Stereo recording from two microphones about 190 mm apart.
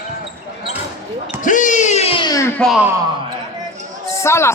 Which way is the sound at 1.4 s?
40° left (ahead or behind).